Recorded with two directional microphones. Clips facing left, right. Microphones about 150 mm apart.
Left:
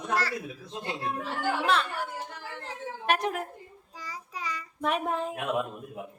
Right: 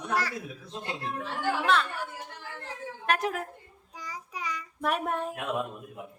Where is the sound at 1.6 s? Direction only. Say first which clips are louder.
Right 1 dB; centre (ahead or behind).